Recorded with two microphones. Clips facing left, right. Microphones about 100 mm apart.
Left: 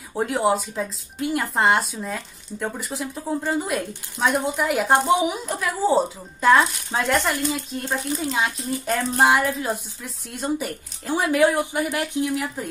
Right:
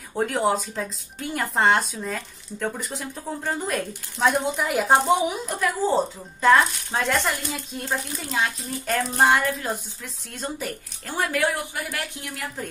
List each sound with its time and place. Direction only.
0.1 s speech: 5° left (ahead or behind)
8.2 s speech: 15° left (ahead or behind)